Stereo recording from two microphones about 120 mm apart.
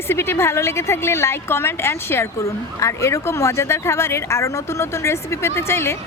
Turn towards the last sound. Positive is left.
turn(degrees=20)  # may be behind; listen again after turning